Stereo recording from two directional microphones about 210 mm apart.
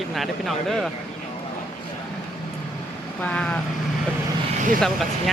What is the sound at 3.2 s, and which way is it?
Speech, 5° left (ahead or behind).